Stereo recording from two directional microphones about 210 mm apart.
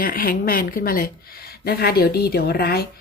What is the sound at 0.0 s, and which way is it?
Speech, 45° left (ahead or behind).